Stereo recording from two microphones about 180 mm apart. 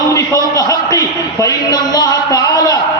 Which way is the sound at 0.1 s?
20° left (ahead or behind).